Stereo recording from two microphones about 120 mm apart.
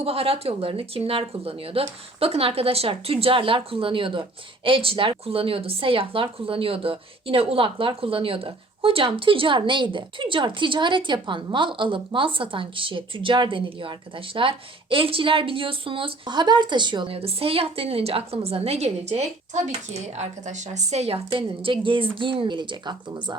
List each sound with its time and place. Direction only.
0.0 s a woman's voice: 55° right (ahead or behind)
21.3 s a woman's voice: 45° right (ahead or behind)